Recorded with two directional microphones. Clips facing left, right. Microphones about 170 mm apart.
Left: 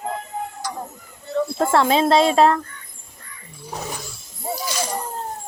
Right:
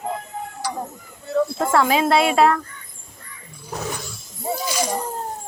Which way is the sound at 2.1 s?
10° right (ahead or behind).